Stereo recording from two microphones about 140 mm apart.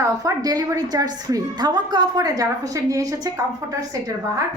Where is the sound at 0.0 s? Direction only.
25° right (ahead or behind).